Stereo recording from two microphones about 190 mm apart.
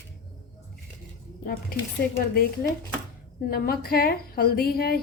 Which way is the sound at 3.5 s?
50° left (ahead or behind).